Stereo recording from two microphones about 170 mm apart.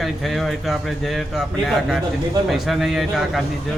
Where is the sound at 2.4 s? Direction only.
Centre (ahead or behind).